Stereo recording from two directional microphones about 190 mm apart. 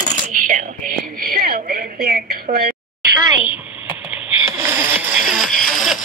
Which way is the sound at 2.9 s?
10° right (ahead or behind).